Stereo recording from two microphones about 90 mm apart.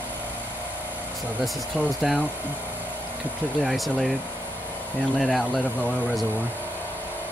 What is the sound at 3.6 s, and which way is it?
Speech, centre (ahead or behind).